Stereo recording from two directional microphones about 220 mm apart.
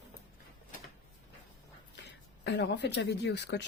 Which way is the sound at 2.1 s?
50° left (ahead or behind).